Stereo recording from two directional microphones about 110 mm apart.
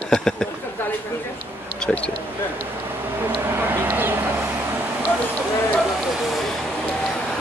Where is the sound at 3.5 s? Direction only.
20° right (ahead or behind).